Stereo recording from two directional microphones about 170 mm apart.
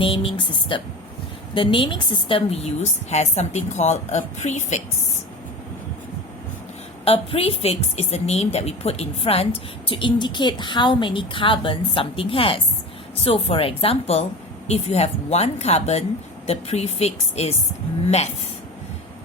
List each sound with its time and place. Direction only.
0.0 s a woman's voice: 30° left (ahead or behind)
7.0 s a woman's voice: 35° left (ahead or behind)